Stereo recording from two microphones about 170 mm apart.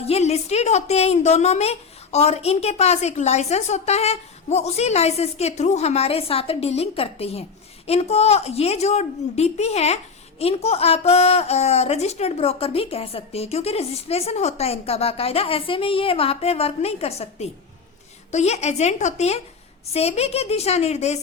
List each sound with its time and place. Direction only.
0.0 s a woman's voice: 40° left (ahead or behind)